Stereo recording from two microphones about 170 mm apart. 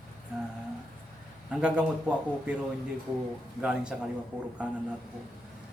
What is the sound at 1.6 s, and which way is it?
Speech, 5° right (ahead or behind).